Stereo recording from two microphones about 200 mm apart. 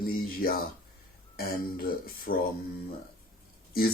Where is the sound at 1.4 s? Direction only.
50° left (ahead or behind).